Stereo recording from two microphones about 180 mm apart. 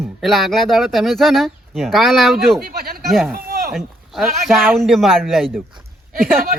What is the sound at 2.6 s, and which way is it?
Speech, 55° right (ahead or behind).